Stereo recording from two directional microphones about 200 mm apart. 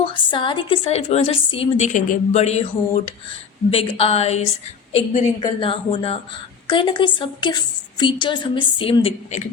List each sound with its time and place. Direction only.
0.0 s a woman's voice: 25° left (ahead or behind)
3.7 s a sound: 30° left (ahead or behind)
5.4 s a woman's voice: 25° left (ahead or behind)